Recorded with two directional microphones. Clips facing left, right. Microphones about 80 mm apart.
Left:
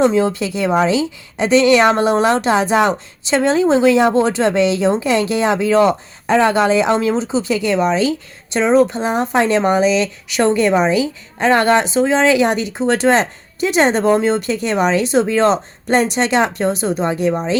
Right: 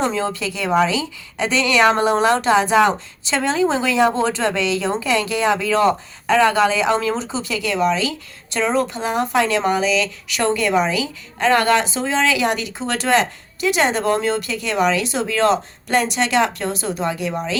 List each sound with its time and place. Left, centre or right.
0.0 s a woman's voice: centre